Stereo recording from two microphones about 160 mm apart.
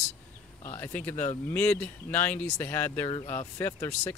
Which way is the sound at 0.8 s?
10° left (ahead or behind).